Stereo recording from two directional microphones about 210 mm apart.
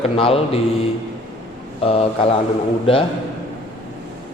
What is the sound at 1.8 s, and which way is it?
Speech, 25° left (ahead or behind).